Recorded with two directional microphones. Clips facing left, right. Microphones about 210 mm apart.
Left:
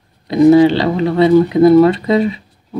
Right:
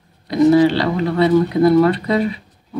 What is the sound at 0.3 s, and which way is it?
Speech, 25° left (ahead or behind).